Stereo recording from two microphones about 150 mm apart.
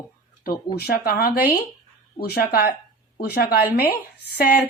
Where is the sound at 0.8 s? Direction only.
90° left.